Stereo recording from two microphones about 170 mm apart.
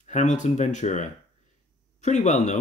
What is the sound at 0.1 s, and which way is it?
Speech, 45° left (ahead or behind).